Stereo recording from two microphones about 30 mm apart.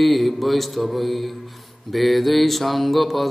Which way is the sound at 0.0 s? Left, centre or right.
Centre.